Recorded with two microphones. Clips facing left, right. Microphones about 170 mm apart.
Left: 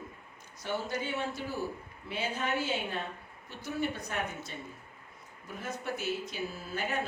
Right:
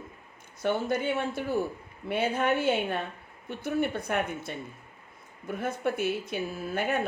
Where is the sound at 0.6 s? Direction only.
55° right (ahead or behind).